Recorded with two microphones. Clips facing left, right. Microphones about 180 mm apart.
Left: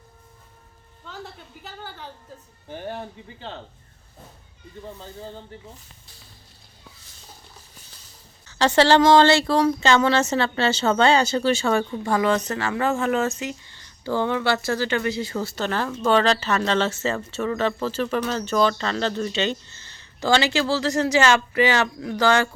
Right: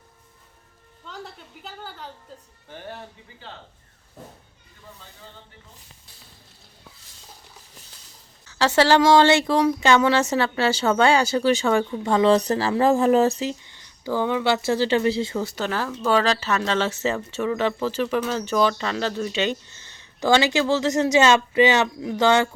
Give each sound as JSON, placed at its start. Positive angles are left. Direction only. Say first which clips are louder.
{"t": 8.4, "sound": "speech", "louder": "left 1 dB", "side_deg": -5}
{"t": 13.7, "sound": "speech", "louder": "even", "side_deg": -15}